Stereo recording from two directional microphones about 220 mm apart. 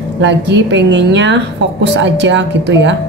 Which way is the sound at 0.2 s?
55° right (ahead or behind).